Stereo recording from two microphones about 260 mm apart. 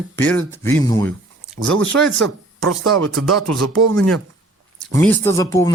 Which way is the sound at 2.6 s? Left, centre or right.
Right.